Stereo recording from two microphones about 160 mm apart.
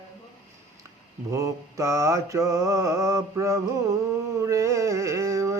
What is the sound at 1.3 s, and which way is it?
Mantra, 20° right (ahead or behind).